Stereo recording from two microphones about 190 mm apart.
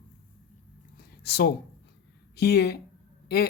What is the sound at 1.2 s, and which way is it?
Speech, 60° left (ahead or behind).